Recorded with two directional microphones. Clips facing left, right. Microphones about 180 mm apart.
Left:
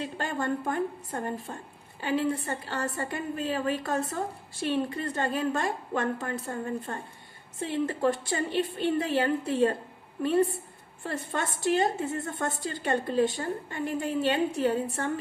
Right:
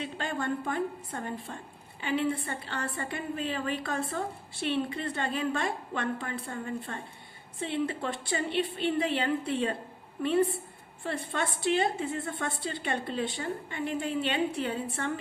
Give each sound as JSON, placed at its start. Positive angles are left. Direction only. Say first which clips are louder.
{"t": 0.2, "sound": "a woman's voice", "louder": "left 2 dB", "side_deg": 45}
{"t": 11.0, "sound": "a woman's voice", "louder": "even", "side_deg": 45}